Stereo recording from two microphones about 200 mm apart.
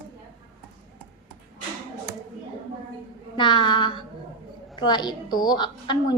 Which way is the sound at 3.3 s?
25° left (ahead or behind).